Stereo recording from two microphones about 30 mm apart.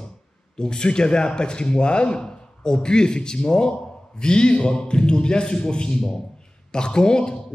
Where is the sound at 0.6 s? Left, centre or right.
Left.